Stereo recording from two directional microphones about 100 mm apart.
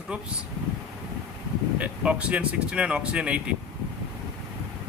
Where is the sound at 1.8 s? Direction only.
10° right (ahead or behind).